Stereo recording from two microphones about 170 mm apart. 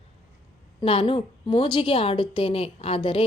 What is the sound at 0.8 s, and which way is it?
A woman's voice, 35° left (ahead or behind).